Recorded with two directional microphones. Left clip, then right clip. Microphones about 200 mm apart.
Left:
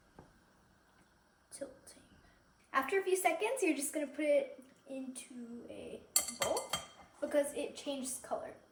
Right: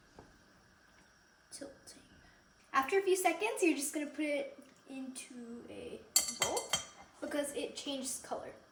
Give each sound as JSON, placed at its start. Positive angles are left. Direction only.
{"t": 2.6, "sound": "a woman's voice", "side_deg": 0}
{"t": 6.1, "sound": "chink", "side_deg": 0}
{"t": 7.2, "sound": "a woman's voice", "side_deg": 0}